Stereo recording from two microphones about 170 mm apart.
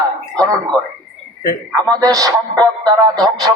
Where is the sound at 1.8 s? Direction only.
20° right (ahead or behind).